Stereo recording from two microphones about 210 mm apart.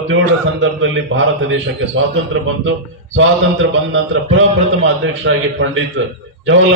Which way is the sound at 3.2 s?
70° right (ahead or behind).